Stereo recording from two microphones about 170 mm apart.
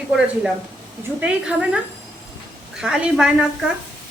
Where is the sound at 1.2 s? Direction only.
5° right (ahead or behind).